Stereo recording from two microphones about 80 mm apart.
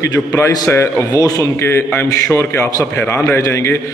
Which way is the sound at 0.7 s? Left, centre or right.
Left.